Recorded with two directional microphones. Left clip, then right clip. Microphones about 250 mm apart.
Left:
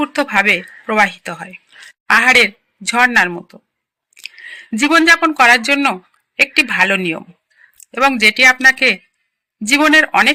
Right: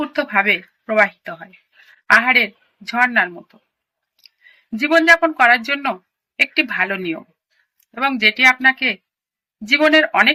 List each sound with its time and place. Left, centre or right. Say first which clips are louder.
0.0 s speech: left 3 dB; left
4.7 s speech: left 2 dB; left